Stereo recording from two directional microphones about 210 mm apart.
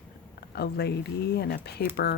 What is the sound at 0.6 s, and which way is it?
Speech, 50° left (ahead or behind).